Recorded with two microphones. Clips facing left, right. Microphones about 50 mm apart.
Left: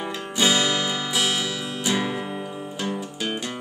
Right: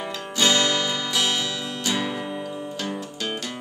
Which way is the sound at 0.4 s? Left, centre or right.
Centre.